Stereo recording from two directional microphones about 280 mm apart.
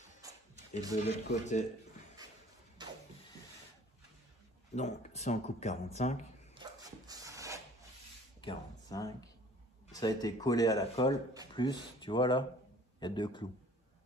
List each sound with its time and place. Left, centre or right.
1.0 s speech: left
2.8 s printer: centre
4.7 s speech: left
6.5 s dog: centre
8.4 s speech: centre